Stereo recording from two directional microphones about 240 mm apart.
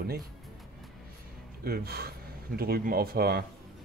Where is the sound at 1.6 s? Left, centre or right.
Right.